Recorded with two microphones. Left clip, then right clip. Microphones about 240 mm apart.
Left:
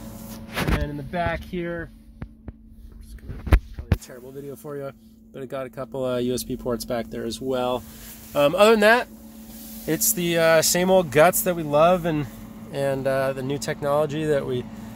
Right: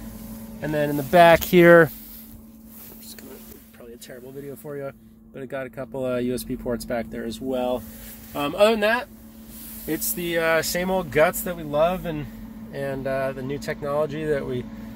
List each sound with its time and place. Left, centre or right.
0.9 s speech: right
4.6 s speech: centre